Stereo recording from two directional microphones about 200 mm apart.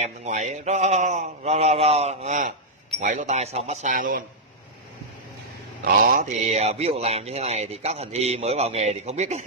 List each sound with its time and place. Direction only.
0.0 s a man's voice: 35° right (ahead or behind)
5.9 s a man's voice: 45° right (ahead or behind)